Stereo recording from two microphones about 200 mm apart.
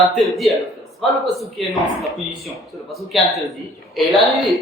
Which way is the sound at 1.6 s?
Centre (ahead or behind).